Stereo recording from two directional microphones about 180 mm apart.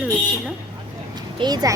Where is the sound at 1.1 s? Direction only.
25° right (ahead or behind).